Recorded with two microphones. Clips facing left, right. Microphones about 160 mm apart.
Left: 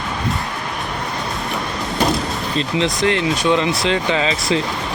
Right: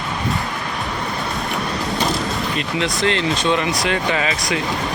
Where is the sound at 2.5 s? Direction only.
20° left (ahead or behind).